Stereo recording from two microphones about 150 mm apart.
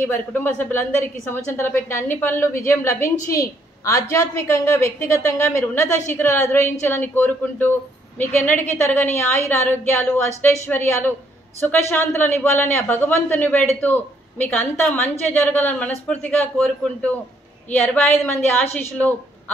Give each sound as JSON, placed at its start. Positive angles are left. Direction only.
{"t": 0.3, "sound": "a woman's voice", "side_deg": 10}